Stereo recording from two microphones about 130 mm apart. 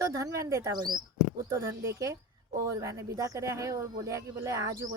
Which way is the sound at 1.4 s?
20° right (ahead or behind).